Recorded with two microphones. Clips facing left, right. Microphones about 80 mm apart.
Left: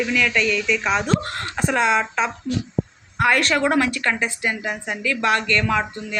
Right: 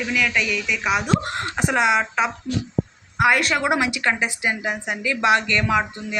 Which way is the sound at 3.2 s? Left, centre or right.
Centre.